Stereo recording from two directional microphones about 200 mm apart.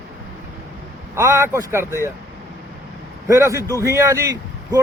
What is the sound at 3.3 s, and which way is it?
Speech, 15° right (ahead or behind).